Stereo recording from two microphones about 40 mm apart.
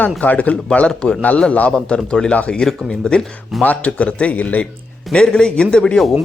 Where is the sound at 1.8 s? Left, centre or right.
Left.